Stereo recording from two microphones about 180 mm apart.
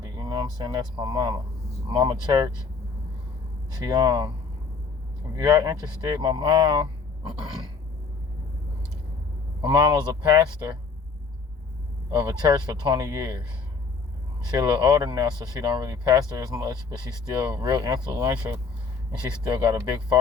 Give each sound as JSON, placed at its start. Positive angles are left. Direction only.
{"t": 0.2, "sound": "speech", "side_deg": -25}
{"t": 3.8, "sound": "speech", "side_deg": -25}
{"t": 5.4, "sound": "speech", "side_deg": -20}
{"t": 9.6, "sound": "speech", "side_deg": -25}
{"t": 12.5, "sound": "speech", "side_deg": -25}
{"t": 14.5, "sound": "speech", "side_deg": -25}